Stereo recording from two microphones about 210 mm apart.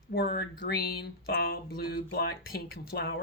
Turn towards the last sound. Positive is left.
turn(degrees=50)  # may be behind; listen again after turning